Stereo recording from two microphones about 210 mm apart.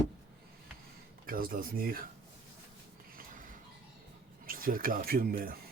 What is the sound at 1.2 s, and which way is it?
Speech, 45° right (ahead or behind).